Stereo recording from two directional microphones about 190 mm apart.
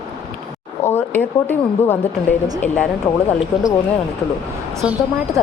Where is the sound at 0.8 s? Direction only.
10° left (ahead or behind).